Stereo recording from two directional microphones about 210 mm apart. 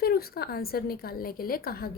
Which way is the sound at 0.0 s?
45° left (ahead or behind).